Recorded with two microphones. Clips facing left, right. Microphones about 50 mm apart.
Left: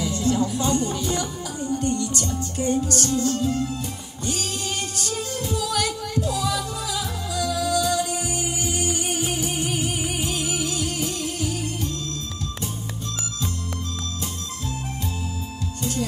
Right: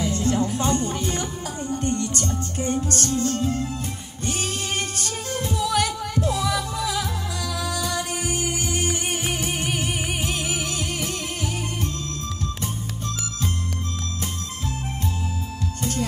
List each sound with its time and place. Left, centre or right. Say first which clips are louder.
0.0 s music: even; right
15.8 s music: even; right